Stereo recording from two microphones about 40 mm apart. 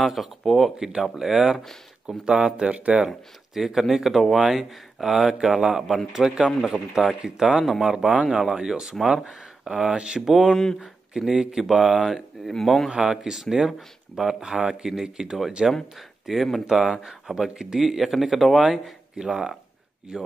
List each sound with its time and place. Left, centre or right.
0.0 s speech: centre
0.7 s speech: centre
2.2 s speech: centre
3.1 s speech: centre
10.4 s speech: centre
11.1 s speech: centre
12.1 s speech: centre
13.0 s speech: centre
16.6 s speech: centre
19.1 s speech: centre